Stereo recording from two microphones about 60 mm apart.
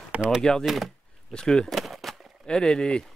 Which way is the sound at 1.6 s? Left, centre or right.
Centre.